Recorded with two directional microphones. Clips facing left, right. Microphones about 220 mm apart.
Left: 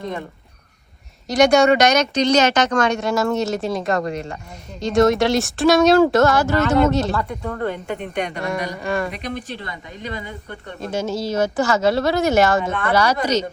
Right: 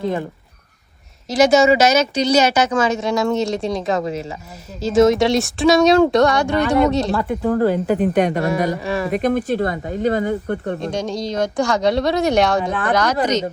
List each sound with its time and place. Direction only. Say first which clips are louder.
1.3 s speech: right 1 dB; centre (ahead or behind)
7.4 s speech: right 8 dB; 30° right (ahead or behind)
8.0 s speech: right 9 dB; 45° right (ahead or behind)
8.4 s speech: right 6 dB; centre (ahead or behind)
9.1 s speech: right 11 dB; 50° right (ahead or behind)
10.8 s speech: right 1 dB; 5° left (ahead or behind)